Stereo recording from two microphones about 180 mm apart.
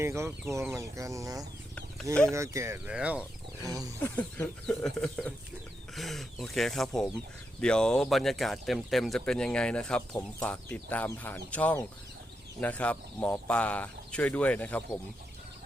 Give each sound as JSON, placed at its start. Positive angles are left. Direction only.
{"t": 0.0, "sound": "speech", "side_deg": -15}
{"t": 4.0, "sound": "speech", "side_deg": 10}